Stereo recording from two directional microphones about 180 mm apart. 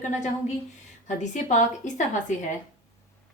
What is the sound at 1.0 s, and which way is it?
A woman's voice, 40° left (ahead or behind).